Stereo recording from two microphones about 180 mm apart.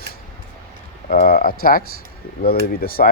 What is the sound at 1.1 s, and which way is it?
Speech, 55° left (ahead or behind).